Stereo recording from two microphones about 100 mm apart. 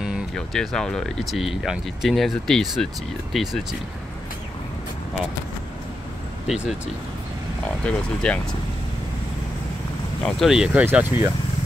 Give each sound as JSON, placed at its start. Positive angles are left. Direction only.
{"t": 0.0, "sound": "speech", "side_deg": 0}
{"t": 6.4, "sound": "speech", "side_deg": -10}
{"t": 7.8, "sound": "speech", "side_deg": 10}
{"t": 10.2, "sound": "speech", "side_deg": -5}
{"t": 10.9, "sound": "speech", "side_deg": -20}